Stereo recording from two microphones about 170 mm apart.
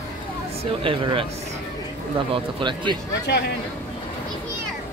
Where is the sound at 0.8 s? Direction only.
30° right (ahead or behind).